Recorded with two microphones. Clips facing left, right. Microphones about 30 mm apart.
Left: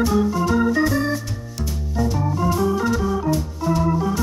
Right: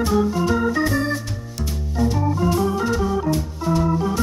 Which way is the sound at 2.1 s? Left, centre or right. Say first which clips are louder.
Even; centre.